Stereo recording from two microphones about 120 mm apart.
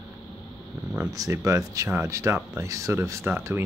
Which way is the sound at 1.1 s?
25° right (ahead or behind).